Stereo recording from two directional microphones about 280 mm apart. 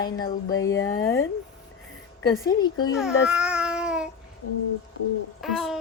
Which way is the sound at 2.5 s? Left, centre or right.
Centre.